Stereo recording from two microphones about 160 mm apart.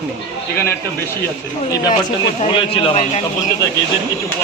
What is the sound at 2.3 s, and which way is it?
Speech, 40° left (ahead or behind).